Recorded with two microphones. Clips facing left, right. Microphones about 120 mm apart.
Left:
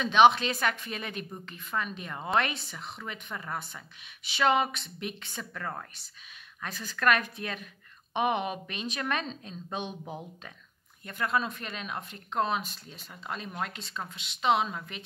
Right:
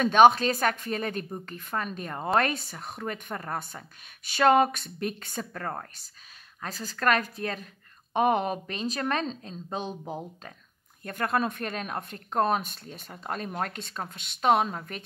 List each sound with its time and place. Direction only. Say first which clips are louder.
0.0 s a woman's voice: right 3 dB; 45° right (ahead or behind)
11.1 s a woman's voice: right 3 dB; 50° right (ahead or behind)